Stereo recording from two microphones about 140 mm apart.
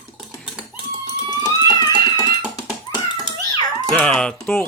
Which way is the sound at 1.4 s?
30° left (ahead or behind).